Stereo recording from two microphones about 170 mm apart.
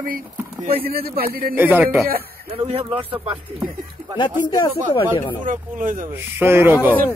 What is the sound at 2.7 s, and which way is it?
Speech, 35° right (ahead or behind).